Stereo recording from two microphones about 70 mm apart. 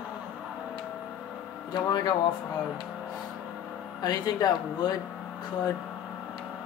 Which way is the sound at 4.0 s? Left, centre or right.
Left.